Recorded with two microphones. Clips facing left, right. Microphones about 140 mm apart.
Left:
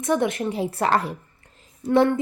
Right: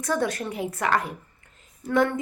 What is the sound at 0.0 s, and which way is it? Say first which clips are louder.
A woman's voice: left 4 dB; 20° left (ahead or behind).